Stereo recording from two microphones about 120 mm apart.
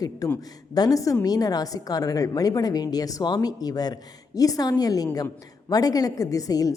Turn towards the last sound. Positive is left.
turn(degrees=30)  # may be behind; listen again after turning